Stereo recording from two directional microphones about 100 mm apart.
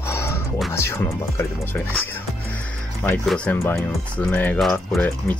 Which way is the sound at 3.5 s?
20° left (ahead or behind).